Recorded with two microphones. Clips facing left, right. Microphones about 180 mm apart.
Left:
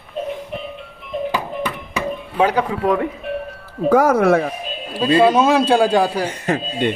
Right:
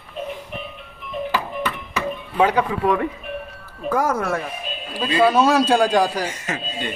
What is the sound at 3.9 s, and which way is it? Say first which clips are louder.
Speech: left 8 dB; 70° left (ahead or behind).